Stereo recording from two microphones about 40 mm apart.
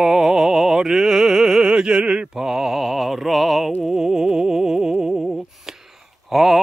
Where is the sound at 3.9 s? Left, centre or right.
Centre.